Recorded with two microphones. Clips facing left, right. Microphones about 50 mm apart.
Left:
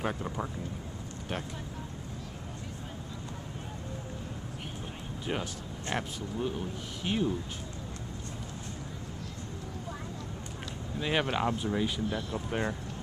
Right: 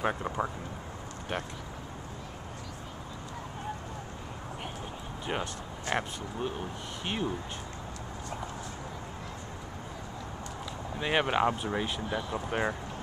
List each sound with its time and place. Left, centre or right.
0.0 s speech: right
5.3 s speech: centre
11.0 s speech: centre